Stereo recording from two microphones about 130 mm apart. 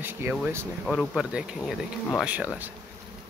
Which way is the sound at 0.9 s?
5° right (ahead or behind).